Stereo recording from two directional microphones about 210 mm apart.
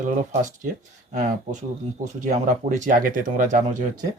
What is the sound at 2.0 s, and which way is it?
Speech, 35° right (ahead or behind).